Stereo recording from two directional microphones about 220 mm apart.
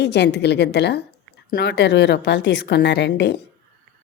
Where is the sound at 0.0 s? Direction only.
50° left (ahead or behind).